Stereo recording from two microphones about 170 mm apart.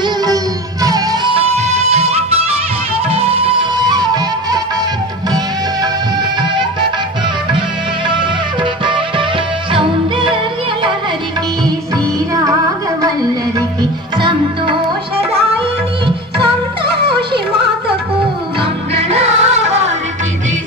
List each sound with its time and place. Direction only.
0.0 s music: 20° right (ahead or behind)
8.8 s music: 30° right (ahead or behind)
14.1 s music: 30° right (ahead or behind)
16.8 s music: 70° right (ahead or behind)
18.6 s music: 35° right (ahead or behind)